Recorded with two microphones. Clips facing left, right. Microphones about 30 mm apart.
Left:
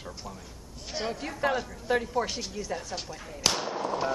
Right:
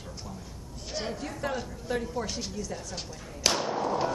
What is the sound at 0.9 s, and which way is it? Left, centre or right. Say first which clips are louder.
A woman's voice: left 1 dB; centre.